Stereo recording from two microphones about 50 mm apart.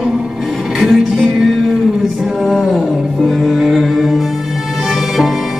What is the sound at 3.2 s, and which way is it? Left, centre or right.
Music, centre.